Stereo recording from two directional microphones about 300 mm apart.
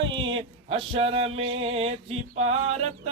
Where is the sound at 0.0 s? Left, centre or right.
Centre.